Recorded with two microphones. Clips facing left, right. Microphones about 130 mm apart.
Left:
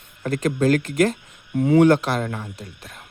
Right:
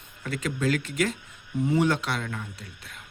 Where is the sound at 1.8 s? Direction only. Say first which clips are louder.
Left 9 dB; 45° left (ahead or behind).